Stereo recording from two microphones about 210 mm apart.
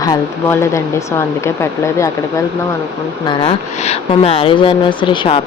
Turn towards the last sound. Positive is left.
turn(degrees=25)  # may be behind; listen again after turning